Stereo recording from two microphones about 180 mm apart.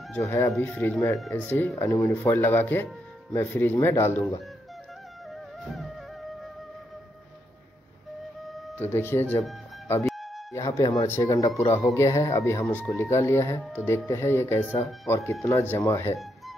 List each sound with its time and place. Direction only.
0.1 s speech: 15° left (ahead or behind)
8.5 s music: centre (ahead or behind)
8.8 s speech: 10° left (ahead or behind)
10.0 s music: centre (ahead or behind)
10.5 s speech: 20° left (ahead or behind)